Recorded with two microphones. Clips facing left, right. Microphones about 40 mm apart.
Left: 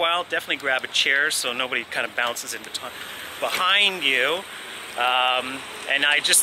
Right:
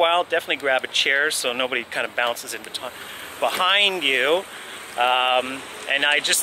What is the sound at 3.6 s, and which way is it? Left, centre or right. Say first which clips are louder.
Speech: even; centre.